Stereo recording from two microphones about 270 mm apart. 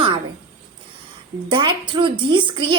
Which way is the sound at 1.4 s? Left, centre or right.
Centre.